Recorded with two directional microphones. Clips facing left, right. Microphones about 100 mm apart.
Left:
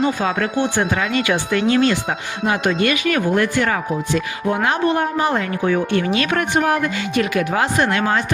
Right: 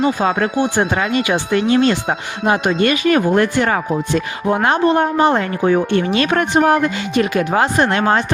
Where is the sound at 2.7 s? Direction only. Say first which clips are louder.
Right 3 dB; 35° right (ahead or behind).